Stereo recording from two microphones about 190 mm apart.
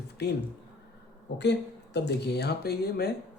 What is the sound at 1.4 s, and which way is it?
Speech, 65° left (ahead or behind).